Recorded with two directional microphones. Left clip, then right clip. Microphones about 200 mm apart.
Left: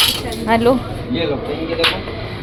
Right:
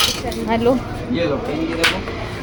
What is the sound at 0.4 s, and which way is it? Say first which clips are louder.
Speech: left 4 dB; centre (ahead or behind).